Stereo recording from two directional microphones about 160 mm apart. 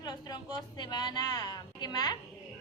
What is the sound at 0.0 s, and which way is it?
A woman's voice, 25° left (ahead or behind).